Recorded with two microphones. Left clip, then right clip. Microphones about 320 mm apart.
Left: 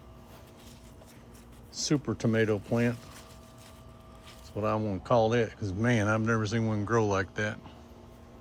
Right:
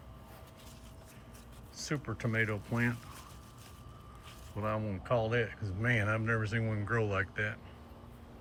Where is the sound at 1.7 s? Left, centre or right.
Centre.